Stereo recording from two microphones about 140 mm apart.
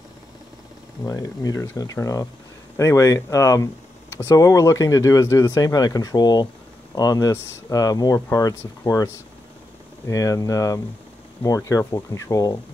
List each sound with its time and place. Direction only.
1.0 s speech: 25° left (ahead or behind)